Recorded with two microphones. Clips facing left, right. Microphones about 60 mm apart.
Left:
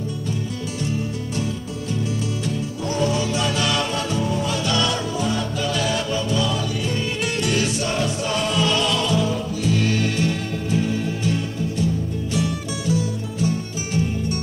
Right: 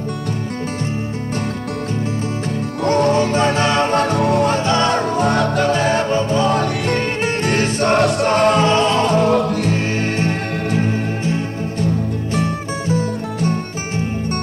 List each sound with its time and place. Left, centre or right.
2.8 s music: right
4.6 s music: right
5.7 s music: right
7.2 s music: right
9.3 s music: right
9.8 s music: right
12.9 s music: right